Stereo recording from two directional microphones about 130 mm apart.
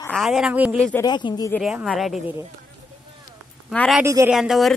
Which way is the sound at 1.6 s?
5° right (ahead or behind).